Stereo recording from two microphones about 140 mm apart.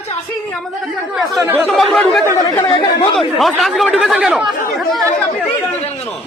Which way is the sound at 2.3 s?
20° left (ahead or behind).